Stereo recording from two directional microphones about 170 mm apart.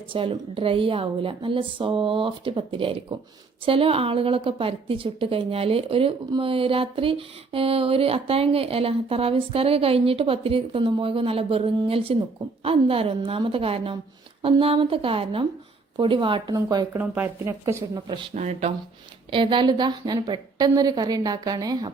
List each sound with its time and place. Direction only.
0.1 s a woman's voice: 35° right (ahead or behind); by 18.0 s 15° right (ahead or behind)
18.3 s a woman's voice: 40° right (ahead or behind)
19.3 s a woman's voice: 30° right (ahead or behind)